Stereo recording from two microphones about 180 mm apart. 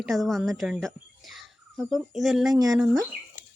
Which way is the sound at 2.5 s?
20° right (ahead or behind).